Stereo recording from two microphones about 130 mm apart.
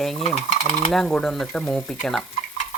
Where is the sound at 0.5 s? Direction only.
60° left (ahead or behind).